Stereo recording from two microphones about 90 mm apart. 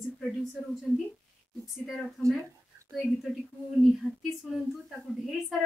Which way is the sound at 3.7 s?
Centre (ahead or behind).